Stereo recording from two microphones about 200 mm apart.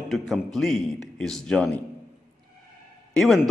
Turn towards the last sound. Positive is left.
turn(degrees=0)  # may be behind; listen again after turning